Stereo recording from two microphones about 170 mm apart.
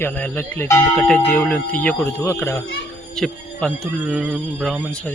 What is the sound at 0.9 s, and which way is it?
Speech, 5° left (ahead or behind).